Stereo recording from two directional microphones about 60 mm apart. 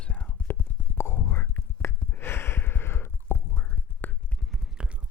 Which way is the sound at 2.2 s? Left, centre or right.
Left.